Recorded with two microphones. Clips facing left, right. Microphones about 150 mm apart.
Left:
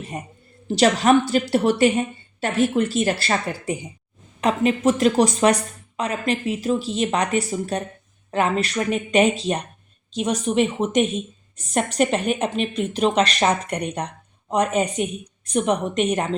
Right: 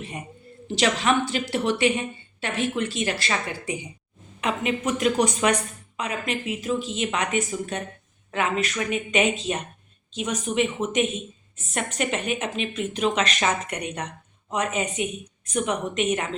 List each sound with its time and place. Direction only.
0.1 s a woman's voice: 40° left (ahead or behind)